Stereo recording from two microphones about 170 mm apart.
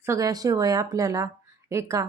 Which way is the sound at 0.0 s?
20° right (ahead or behind).